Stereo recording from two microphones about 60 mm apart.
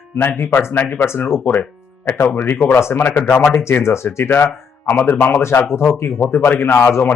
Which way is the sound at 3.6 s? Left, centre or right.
Left.